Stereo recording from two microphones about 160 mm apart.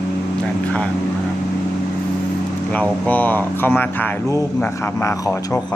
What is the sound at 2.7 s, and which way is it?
Speech, 10° left (ahead or behind).